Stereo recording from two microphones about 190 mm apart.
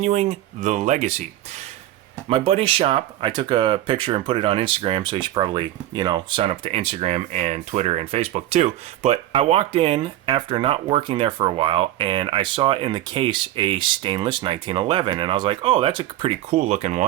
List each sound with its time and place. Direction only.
0.0 s speech: 35° right (ahead or behind)
2.3 s speech: 30° right (ahead or behind)